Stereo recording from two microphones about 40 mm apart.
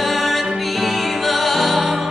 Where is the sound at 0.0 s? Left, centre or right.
Centre.